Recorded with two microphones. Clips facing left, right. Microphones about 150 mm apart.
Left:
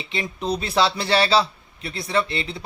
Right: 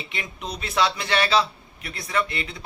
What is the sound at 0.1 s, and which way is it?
A man's voice, 30° left (ahead or behind).